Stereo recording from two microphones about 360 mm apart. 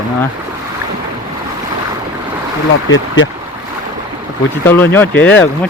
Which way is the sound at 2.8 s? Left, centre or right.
Left.